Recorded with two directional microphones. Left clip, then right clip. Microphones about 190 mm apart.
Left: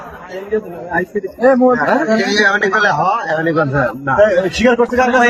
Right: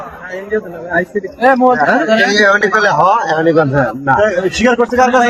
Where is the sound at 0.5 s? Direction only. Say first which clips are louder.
Right 2 dB; 5° right (ahead or behind).